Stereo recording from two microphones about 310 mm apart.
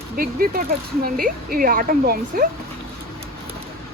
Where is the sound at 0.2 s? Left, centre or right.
Right.